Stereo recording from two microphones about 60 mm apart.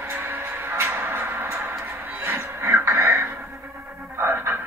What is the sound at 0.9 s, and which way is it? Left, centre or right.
Music, right.